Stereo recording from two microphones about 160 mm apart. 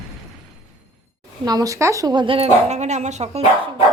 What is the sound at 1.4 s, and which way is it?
Speech, 25° right (ahead or behind).